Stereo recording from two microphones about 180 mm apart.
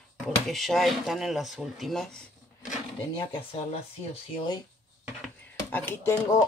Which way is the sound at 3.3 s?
30° left (ahead or behind).